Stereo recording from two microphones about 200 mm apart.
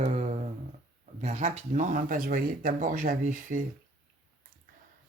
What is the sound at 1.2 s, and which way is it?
Speech, 35° right (ahead or behind).